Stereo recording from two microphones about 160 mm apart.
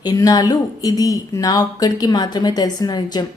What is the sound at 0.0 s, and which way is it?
Speech, 25° left (ahead or behind).